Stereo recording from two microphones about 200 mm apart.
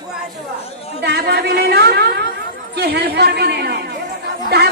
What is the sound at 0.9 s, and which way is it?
A woman's voice, 55° right (ahead or behind).